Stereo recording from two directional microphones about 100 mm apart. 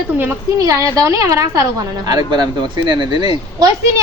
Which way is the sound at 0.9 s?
35° right (ahead or behind).